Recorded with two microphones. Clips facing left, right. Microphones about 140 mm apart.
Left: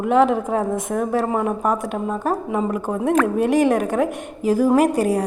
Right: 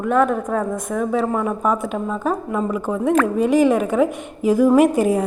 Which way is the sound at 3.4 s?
60° left (ahead or behind).